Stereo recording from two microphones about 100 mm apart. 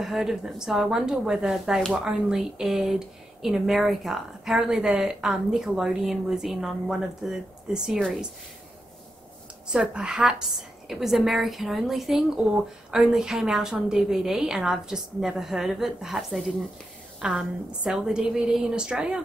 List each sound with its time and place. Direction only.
0.0 s speech: 5° right (ahead or behind)
9.7 s a woman's voice: 10° right (ahead or behind)